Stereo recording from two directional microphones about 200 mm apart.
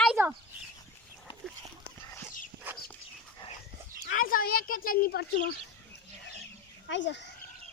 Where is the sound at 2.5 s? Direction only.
50° right (ahead or behind).